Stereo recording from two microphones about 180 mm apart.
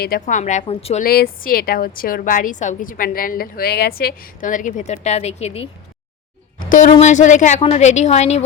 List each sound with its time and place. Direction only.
0.0 s a woman's voice: 50° left (ahead or behind); by 1.0 s 35° left (ahead or behind)
1.0 s a woman's voice: 55° left (ahead or behind); by 8.4 s 40° left (ahead or behind)